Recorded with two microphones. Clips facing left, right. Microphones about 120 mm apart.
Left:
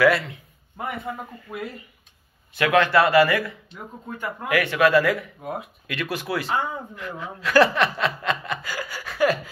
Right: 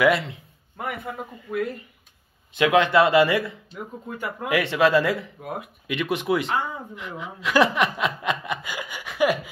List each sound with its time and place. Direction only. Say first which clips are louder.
0.0 s speech: left 1 dB; 25° right (ahead or behind)
0.7 s a man's voice: left 1 dB; centre (ahead or behind)
2.5 s speech: right 1 dB; 20° right (ahead or behind)
3.7 s speech: right 2 dB; 5° right (ahead or behind)
4.5 s speech: even; 25° right (ahead or behind)